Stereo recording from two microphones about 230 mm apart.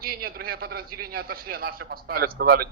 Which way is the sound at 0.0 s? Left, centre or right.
Right.